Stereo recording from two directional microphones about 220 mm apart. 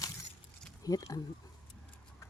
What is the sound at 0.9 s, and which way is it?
Speech, 15° left (ahead or behind).